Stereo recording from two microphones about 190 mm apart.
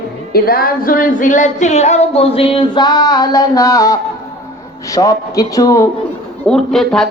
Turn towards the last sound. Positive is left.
turn(degrees=0)  # may be behind; listen again after turning